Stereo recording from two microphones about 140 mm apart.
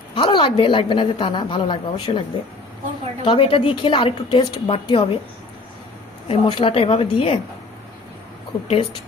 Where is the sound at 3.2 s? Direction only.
40° left (ahead or behind).